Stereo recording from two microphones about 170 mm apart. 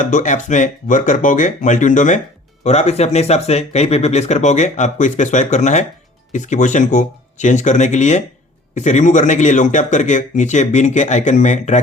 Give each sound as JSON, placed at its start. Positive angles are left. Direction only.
{"t": 0.0, "sound": "speech", "side_deg": 50}